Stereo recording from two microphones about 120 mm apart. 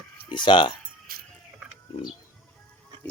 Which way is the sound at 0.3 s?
40° left (ahead or behind).